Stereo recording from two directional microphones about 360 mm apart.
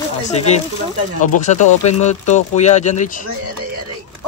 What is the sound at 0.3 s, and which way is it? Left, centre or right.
Speech, centre.